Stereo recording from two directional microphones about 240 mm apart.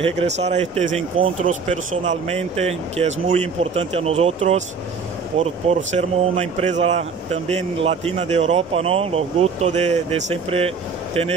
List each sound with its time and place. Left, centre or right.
0.0 s speech: right